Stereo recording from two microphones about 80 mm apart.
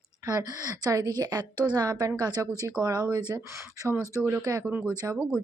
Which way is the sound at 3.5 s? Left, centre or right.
Right.